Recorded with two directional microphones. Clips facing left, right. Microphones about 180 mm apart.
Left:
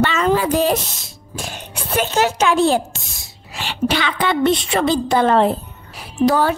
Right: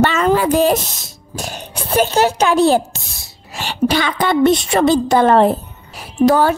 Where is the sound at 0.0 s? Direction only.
50° right (ahead or behind).